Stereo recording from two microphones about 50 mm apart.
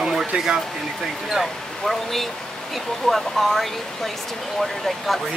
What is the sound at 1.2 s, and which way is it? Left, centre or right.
Speech, centre.